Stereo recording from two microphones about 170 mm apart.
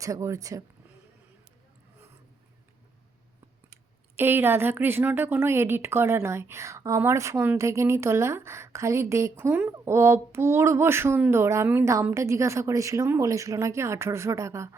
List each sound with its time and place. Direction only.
0.0 s speech: 20° right (ahead or behind)
4.2 s a woman's voice: 15° right (ahead or behind)